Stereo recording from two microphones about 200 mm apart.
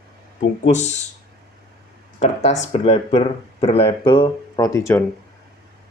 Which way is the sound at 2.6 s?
35° left (ahead or behind).